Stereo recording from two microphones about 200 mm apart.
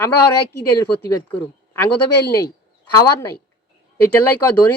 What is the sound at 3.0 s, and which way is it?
Speech, 15° left (ahead or behind).